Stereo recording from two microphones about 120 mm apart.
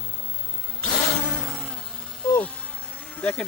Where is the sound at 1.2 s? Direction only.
Centre (ahead or behind).